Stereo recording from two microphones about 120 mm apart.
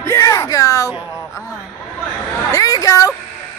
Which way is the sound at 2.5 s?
30° left (ahead or behind).